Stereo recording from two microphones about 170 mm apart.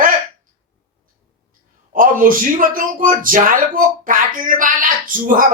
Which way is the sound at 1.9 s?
55° right (ahead or behind).